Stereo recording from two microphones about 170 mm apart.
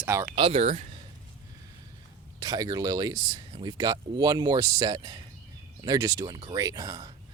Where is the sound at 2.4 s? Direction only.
25° right (ahead or behind).